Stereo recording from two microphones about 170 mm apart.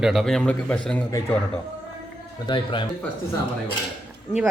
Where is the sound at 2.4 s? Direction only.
30° left (ahead or behind).